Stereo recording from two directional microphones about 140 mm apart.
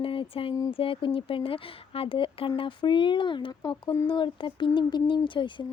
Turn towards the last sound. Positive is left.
turn(degrees=35)  # may be behind; listen again after turning